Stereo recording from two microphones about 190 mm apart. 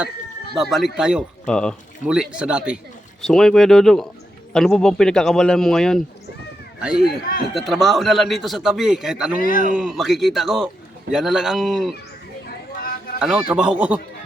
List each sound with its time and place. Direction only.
0.5 s speech: centre (ahead or behind)
7.0 s a man's voice: 50° left (ahead or behind)
7.5 s speech: centre (ahead or behind)
9.4 s a man's voice: 45° left (ahead or behind)
9.7 s speech: centre (ahead or behind)
13.1 s speech: 5° right (ahead or behind)